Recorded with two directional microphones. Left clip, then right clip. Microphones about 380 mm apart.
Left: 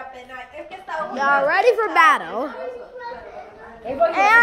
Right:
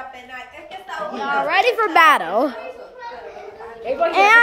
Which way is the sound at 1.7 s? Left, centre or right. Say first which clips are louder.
Right 2 dB; centre.